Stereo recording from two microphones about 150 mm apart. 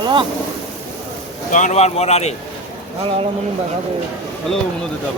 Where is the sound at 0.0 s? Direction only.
30° right (ahead or behind).